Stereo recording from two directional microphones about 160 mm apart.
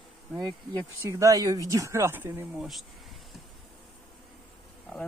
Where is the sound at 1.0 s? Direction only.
20° right (ahead or behind).